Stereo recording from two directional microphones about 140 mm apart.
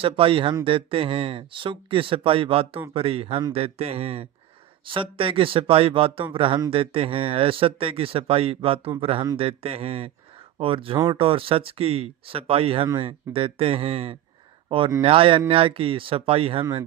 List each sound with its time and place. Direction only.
0.0 s speech: 40° right (ahead or behind)